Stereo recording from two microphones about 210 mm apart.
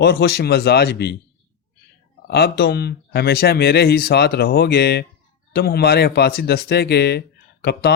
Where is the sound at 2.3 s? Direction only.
50° left (ahead or behind).